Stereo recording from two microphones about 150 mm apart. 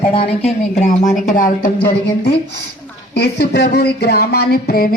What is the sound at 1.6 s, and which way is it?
Speech, 90° left.